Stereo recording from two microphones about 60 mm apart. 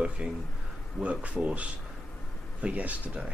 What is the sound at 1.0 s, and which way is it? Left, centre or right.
Speech, right.